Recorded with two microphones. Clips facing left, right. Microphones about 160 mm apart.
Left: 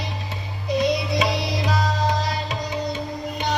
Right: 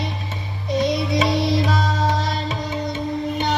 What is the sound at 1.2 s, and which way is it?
Music, 20° right (ahead or behind).